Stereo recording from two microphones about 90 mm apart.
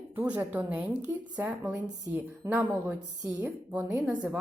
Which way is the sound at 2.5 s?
20° right (ahead or behind).